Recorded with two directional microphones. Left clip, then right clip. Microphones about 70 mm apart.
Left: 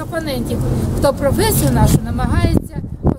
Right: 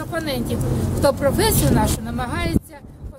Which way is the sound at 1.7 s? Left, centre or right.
Centre.